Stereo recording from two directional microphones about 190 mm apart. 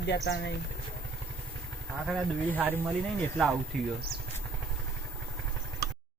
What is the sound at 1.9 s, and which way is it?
Speech, centre (ahead or behind).